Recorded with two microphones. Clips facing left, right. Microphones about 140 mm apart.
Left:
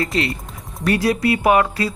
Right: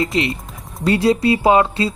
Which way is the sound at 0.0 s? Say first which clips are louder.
Right 2 dB; 20° right (ahead or behind).